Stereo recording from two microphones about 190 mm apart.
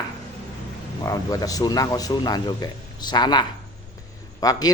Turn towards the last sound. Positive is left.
turn(degrees=20)  # may be behind; listen again after turning